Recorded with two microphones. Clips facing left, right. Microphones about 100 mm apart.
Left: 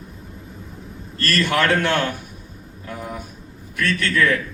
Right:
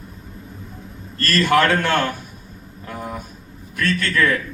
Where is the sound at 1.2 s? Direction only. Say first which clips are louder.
Right 3 dB; 45° right (ahead or behind).